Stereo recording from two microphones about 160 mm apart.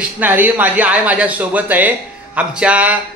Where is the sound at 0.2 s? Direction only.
10° right (ahead or behind).